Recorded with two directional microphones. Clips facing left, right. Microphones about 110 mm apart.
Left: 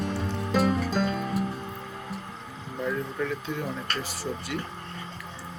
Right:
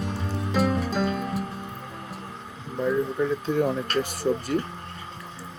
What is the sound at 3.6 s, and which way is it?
Speech, 45° right (ahead or behind).